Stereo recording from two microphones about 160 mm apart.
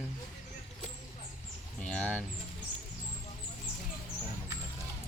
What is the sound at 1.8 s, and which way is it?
Bird, 5° left (ahead or behind).